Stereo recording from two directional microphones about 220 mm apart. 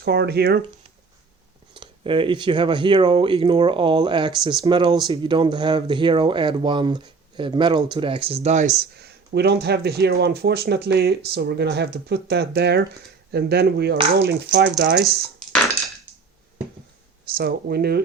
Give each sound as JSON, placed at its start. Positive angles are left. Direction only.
{"t": 0.0, "sound": "speech", "side_deg": -45}
{"t": 1.7, "sound": "speech", "side_deg": -20}
{"t": 17.3, "sound": "speech", "side_deg": -45}